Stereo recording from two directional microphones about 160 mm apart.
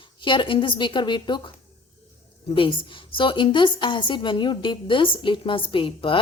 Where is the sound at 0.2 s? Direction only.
30° left (ahead or behind).